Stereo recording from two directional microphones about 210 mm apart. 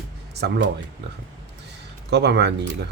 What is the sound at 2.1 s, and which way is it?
Speech, 55° right (ahead or behind).